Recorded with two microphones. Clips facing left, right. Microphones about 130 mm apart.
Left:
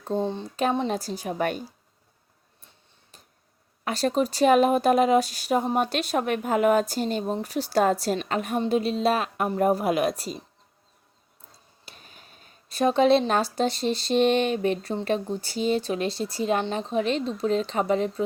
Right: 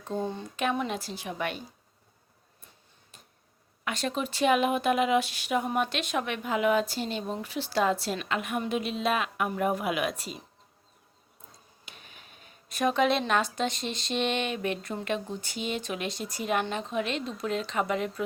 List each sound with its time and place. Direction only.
0.0 s speech: 25° left (ahead or behind)
0.5 s speech: 35° left (ahead or behind)
3.8 s speech: 35° left (ahead or behind)
11.9 s speech: 35° left (ahead or behind)